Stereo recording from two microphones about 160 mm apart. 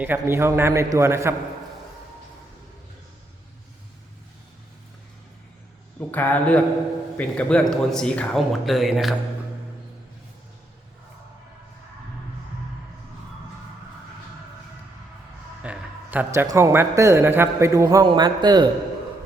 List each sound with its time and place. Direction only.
0.0 s a man's voice: 15° right (ahead or behind)
6.1 s speech: 10° left (ahead or behind)
15.6 s a man's voice: 10° right (ahead or behind); by 18.7 s 25° right (ahead or behind)